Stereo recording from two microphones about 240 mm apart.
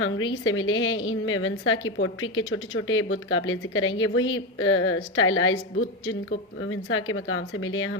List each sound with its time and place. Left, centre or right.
0.0 s a woman's voice: left
6.6 s a woman's voice: left